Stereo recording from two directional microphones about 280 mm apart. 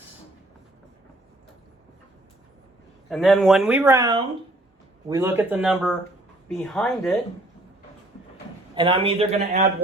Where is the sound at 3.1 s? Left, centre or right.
Centre.